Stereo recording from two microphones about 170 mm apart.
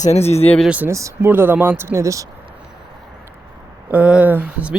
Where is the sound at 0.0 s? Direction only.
40° left (ahead or behind).